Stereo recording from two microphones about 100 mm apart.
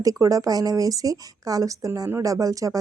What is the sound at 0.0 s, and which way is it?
Speech, 35° right (ahead or behind).